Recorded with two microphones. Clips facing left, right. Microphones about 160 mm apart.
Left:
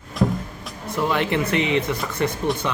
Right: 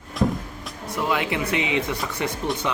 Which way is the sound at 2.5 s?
Centre (ahead or behind).